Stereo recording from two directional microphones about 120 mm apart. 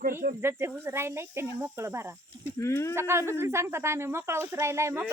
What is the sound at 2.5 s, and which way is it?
Speech, 25° left (ahead or behind).